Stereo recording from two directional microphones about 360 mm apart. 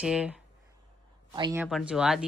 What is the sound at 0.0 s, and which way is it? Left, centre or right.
Speech, centre.